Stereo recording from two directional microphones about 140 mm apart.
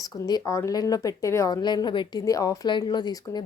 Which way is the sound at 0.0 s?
30° left (ahead or behind).